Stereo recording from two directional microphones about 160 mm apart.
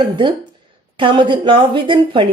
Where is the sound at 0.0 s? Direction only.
30° right (ahead or behind).